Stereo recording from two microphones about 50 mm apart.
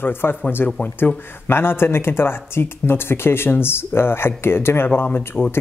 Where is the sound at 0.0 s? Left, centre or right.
Left.